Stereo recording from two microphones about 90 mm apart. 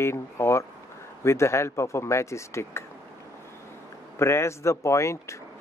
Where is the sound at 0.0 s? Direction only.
30° left (ahead or behind).